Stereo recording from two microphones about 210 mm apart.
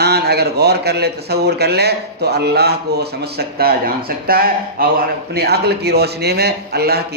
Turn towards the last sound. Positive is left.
turn(degrees=-50)  # may be behind; listen again after turning